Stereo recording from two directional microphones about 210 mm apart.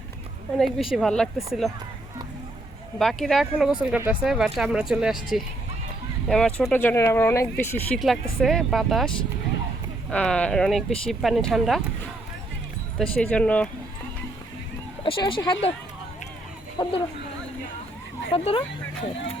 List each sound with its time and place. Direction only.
0.6 s speech: centre (ahead or behind)
3.0 s speech: centre (ahead or behind)
13.0 s speech: 5° left (ahead or behind)
15.0 s speech: 25° left (ahead or behind)
16.8 s speech: 25° left (ahead or behind)
18.3 s speech: 30° left (ahead or behind)